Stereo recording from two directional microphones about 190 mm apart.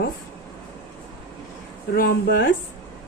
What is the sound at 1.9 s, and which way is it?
Speech, 50° left (ahead or behind).